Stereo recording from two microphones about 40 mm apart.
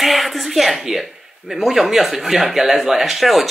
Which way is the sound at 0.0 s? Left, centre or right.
Centre.